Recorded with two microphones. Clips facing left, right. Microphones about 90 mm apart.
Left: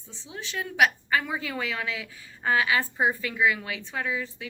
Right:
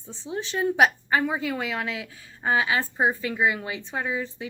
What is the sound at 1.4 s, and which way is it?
Speech, 15° right (ahead or behind).